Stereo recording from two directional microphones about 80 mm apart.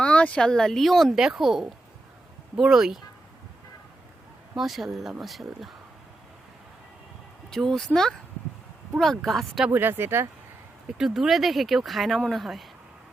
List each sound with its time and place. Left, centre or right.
0.0 s speech: centre
4.5 s speech: centre
7.5 s speech: centre
9.0 s speech: centre
9.6 s speech: right
10.9 s speech: centre